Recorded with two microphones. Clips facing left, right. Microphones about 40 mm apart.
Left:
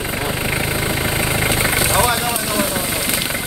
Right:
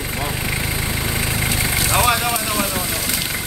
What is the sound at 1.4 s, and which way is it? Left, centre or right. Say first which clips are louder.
Vehicle: left 4 dB; left.